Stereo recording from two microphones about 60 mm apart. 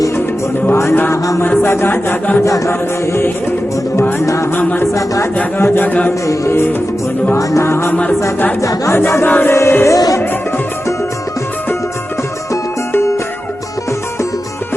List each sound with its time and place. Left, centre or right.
0.7 s music: left
1.1 s music: left
1.7 s a sound: left
2.4 s music: left
2.6 s music: left
4.5 s music: left
4.9 s music: left
5.5 s a sound: left
6.2 s music: left
8.6 s music: left
8.9 s music: left
9.2 s music: left
9.5 s music: left